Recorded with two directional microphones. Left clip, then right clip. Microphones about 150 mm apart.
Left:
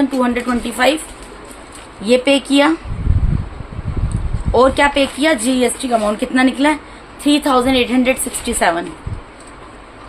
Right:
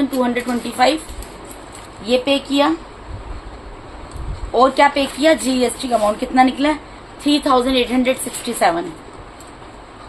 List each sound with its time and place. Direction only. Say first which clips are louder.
0.2 s a woman's voice: left 2 dB; 30° left (ahead or behind)
2.0 s speech: left 4 dB; 60° left (ahead or behind)
4.5 s speech: left 1 dB; 50° left (ahead or behind)
5.2 s a woman's voice: right 3 dB; 30° left (ahead or behind)